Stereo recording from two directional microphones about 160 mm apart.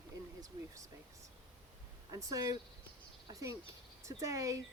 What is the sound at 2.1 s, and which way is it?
Speech, 20° right (ahead or behind).